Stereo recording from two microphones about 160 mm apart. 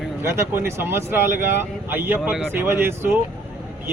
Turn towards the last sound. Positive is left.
turn(degrees=-15)  # may be behind; listen again after turning